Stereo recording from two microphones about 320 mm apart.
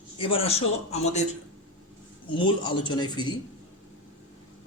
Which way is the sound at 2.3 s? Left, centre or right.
Centre.